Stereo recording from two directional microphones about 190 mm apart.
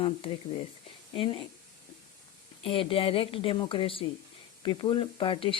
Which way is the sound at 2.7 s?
30° left (ahead or behind).